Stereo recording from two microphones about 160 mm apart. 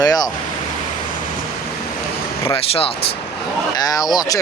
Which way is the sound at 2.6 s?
35° left (ahead or behind).